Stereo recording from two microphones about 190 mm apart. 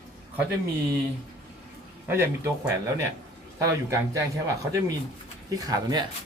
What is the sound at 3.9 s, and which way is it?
Speech, 15° right (ahead or behind).